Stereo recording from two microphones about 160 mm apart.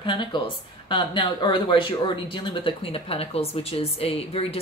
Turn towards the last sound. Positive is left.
turn(degrees=35)  # may be behind; listen again after turning